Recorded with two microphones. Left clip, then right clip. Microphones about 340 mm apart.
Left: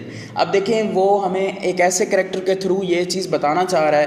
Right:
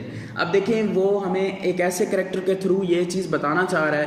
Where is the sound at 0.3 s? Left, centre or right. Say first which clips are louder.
Left 4 dB; centre.